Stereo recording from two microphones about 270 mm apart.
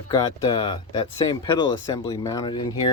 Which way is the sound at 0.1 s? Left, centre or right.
Centre.